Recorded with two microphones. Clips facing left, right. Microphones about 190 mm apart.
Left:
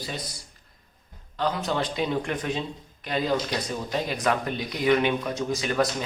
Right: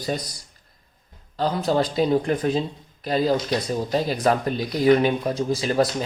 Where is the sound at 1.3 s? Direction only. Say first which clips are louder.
Right 5 dB; 35° right (ahead or behind).